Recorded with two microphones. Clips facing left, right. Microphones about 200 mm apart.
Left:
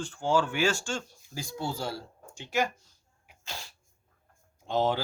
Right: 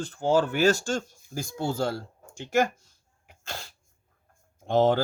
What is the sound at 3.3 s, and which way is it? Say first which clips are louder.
Sneeze: right 4 dB; 55° right (ahead or behind).